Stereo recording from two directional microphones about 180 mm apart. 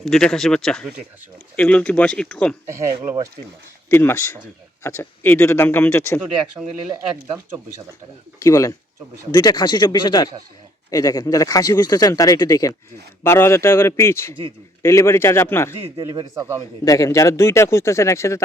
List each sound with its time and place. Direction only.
0.0 s speech: centre (ahead or behind)
2.6 s speech: 15° right (ahead or behind)
3.8 s speech: 15° left (ahead or behind)
8.4 s speech: 20° left (ahead or behind)
16.0 s speech: 25° right (ahead or behind)
16.8 s speech: 20° left (ahead or behind)